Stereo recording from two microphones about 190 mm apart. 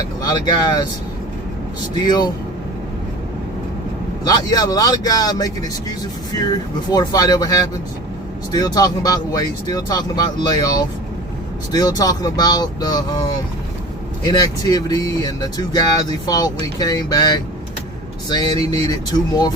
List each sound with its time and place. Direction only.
0.2 s speech: 20° left (ahead or behind)
2.0 s speech: 20° left (ahead or behind)
4.3 s speech: 20° left (ahead or behind)
14.3 s speech: 20° left (ahead or behind)